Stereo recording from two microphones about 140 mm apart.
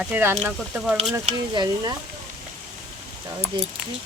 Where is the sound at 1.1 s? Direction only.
30° right (ahead or behind).